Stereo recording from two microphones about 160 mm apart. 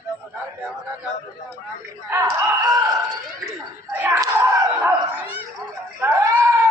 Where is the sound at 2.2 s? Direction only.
25° right (ahead or behind).